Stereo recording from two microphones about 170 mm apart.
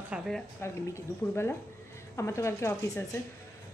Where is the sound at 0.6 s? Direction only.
15° left (ahead or behind).